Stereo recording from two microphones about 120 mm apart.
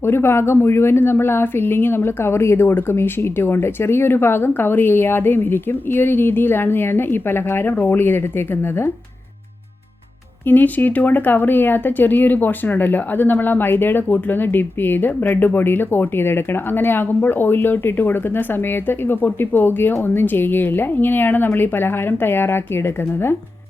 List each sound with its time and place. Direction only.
0.0 s a woman's voice: 20° left (ahead or behind)
10.4 s speech: 15° left (ahead or behind)